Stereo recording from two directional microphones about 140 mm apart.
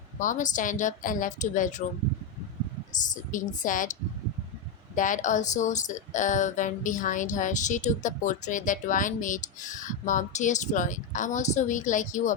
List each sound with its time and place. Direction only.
0.2 s a woman's voice: 65° left (ahead or behind)
2.9 s speech: 65° left (ahead or behind)
4.9 s speech: 65° left (ahead or behind)